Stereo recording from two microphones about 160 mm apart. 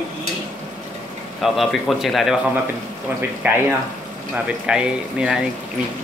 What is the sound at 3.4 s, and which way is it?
Speech, 10° right (ahead or behind).